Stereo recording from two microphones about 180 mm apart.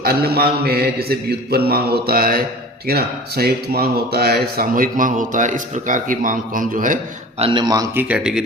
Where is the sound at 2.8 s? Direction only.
60° right (ahead or behind).